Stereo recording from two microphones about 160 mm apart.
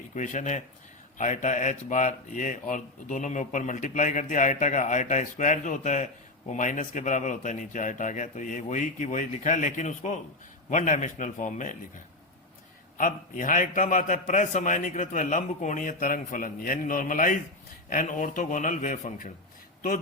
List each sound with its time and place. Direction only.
0.1 s speech: 50° left (ahead or behind)
13.0 s a man's voice: 55° left (ahead or behind)